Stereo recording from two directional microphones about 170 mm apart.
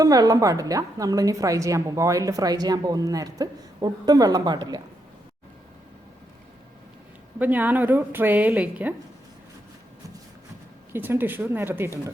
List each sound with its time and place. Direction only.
0.0 s a woman's voice: 20° right (ahead or behind)
7.3 s a woman's voice: 10° right (ahead or behind)
10.9 s a woman's voice: 10° right (ahead or behind)